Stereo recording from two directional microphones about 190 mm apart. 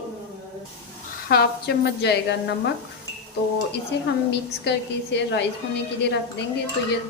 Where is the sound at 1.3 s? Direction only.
55° left (ahead or behind).